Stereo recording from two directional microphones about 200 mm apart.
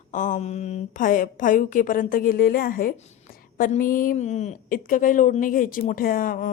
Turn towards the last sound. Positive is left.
turn(degrees=45)  # may be behind; listen again after turning